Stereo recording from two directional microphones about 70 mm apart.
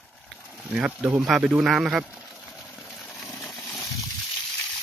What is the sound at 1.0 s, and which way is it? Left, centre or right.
Speech, right.